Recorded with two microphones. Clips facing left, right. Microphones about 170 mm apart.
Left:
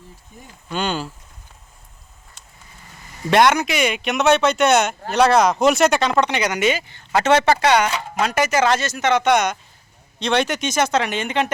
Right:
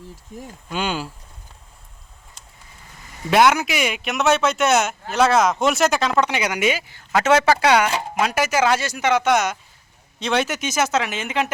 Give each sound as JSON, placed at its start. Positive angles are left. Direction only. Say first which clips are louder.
{"t": 0.3, "sound": "speech", "louder": "right 9 dB", "side_deg": -90}
{"t": 0.7, "sound": "speech", "louder": "left 1 dB", "side_deg": -5}
{"t": 3.2, "sound": "speech", "louder": "left 1 dB", "side_deg": -5}